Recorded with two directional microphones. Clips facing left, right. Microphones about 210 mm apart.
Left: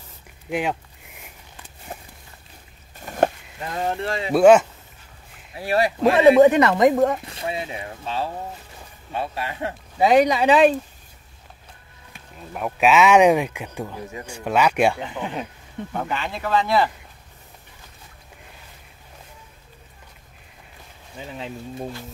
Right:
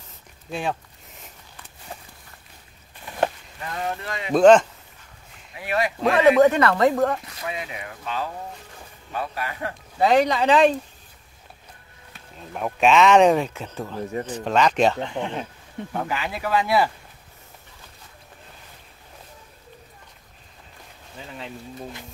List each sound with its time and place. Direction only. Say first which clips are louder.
0.5 s a sound: left 3 dB; 15° left (ahead or behind)
3.0 s a sound: left 4 dB; 45° left (ahead or behind)
3.6 s speech: left 4 dB; 30° left (ahead or behind)
4.3 s speech: left 1 dB; 10° left (ahead or behind)
5.6 s speech: left 4 dB; 35° left (ahead or behind)
6.1 s speech: left 3 dB; 25° left (ahead or behind)
7.2 s speech: left 3 dB; 30° left (ahead or behind)
9.9 s speech: left 2 dB; 10° left (ahead or behind)
12.1 s speech: even; 5° left (ahead or behind); by 16.9 s 10° right (ahead or behind)